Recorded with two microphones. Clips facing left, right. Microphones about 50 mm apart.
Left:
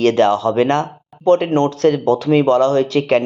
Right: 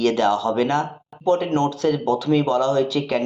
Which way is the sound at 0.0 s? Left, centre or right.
Left.